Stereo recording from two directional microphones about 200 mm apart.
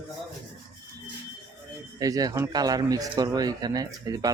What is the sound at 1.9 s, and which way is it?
Speech, 20° right (ahead or behind).